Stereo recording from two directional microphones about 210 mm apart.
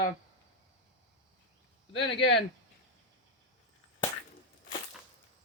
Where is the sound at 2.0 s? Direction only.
55° left (ahead or behind).